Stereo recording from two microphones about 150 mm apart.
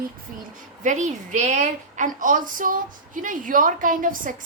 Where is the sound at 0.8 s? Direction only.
55° right (ahead or behind).